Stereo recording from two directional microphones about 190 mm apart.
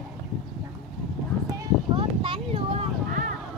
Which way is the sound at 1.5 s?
20° right (ahead or behind).